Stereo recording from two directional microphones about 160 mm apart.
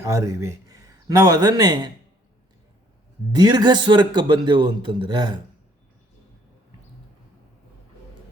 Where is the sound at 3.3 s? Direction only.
25° right (ahead or behind).